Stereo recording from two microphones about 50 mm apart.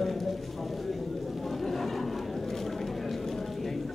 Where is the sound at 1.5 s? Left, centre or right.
Centre.